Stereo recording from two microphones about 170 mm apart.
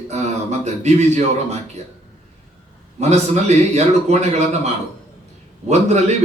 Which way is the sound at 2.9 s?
40° right (ahead or behind).